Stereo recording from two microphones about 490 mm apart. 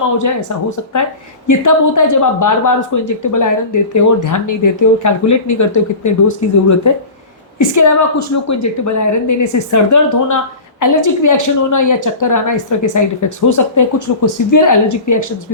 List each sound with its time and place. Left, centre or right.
0.2 s a woman's voice: left
1.5 s a woman's voice: left